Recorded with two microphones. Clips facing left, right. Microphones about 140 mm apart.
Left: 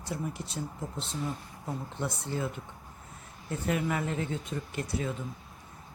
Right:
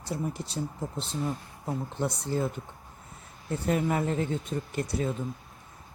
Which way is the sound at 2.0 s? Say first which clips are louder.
Right 4 dB; 35° right (ahead or behind).